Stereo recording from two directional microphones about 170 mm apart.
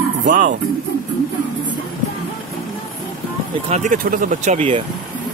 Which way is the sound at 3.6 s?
45° right (ahead or behind).